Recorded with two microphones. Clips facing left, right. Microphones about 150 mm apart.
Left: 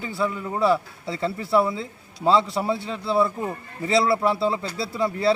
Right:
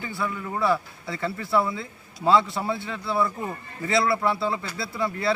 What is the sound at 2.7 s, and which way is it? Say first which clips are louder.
A man's voice: left 3 dB; 30° left (ahead or behind).